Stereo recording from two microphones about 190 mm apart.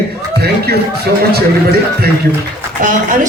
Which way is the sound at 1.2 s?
55° right (ahead or behind).